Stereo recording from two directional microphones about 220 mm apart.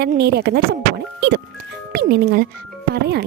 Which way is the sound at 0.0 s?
45° right (ahead or behind).